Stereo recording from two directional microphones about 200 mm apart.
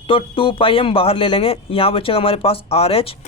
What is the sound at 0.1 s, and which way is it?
Speech, 25° left (ahead or behind).